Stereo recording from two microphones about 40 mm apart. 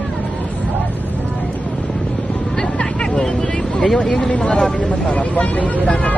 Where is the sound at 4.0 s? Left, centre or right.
Centre.